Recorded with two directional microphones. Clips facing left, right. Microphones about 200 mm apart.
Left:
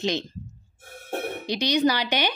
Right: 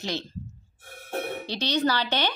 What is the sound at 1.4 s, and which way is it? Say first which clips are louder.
Speech: left 5 dB; 15° left (ahead or behind).